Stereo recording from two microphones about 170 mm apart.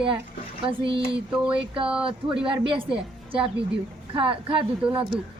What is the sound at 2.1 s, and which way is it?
A woman's voice, 30° right (ahead or behind).